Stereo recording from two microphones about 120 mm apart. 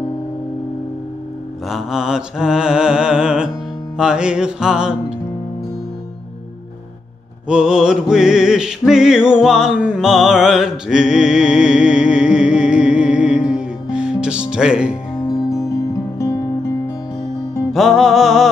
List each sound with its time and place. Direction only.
1.7 s mantra: 5° right (ahead or behind)
7.4 s music: 5° right (ahead or behind)
15.5 s music: 25° left (ahead or behind)
17.7 s music: centre (ahead or behind)